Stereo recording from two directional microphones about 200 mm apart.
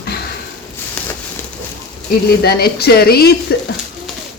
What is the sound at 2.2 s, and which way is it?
A woman's voice, 50° left (ahead or behind).